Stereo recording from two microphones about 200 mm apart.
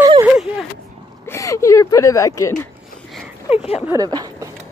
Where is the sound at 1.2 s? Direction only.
15° left (ahead or behind).